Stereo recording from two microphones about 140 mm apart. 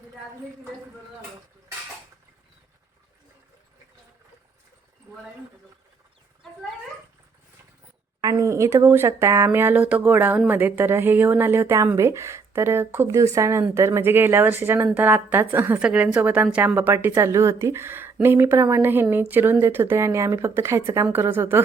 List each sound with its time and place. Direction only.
8.2 s a woman's voice: 25° right (ahead or behind)